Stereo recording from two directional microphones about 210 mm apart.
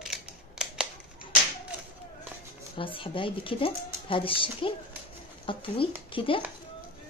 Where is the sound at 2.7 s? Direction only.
25° left (ahead or behind).